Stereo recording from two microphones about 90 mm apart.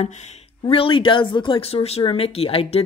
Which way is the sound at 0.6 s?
85° left.